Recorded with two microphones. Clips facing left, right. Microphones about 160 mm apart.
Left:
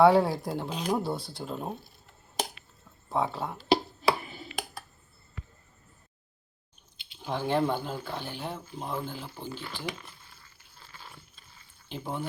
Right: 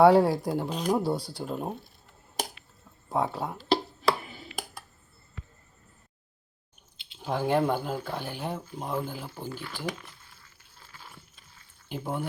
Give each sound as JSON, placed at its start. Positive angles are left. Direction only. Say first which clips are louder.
{"t": 0.0, "sound": "speech", "louder": "right 2 dB", "side_deg": -10}
{"t": 3.1, "sound": "speech", "louder": "right 1 dB", "side_deg": -10}
{"t": 3.6, "sound": "finger snapping", "louder": "left 2 dB", "side_deg": 10}
{"t": 7.3, "sound": "speech", "louder": "right 2 dB", "side_deg": -10}
{"t": 9.5, "sound": "speech", "louder": "right 1 dB", "side_deg": 10}
{"t": 10.9, "sound": "a sound", "louder": "even", "side_deg": -5}
{"t": 11.9, "sound": "speech", "louder": "right 3 dB", "side_deg": -10}